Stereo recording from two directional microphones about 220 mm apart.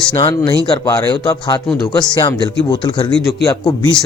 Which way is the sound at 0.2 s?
20° left (ahead or behind).